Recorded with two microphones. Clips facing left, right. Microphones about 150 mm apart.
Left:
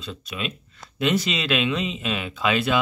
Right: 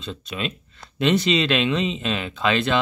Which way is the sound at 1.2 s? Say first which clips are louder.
Right 4 dB; 5° left (ahead or behind).